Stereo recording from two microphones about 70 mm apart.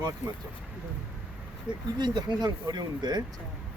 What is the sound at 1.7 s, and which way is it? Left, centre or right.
Speech, centre.